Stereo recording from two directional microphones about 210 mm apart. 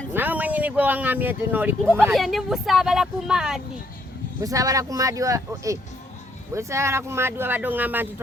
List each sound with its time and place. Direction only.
0.1 s speech: 10° right (ahead or behind)
4.4 s speech: 15° right (ahead or behind)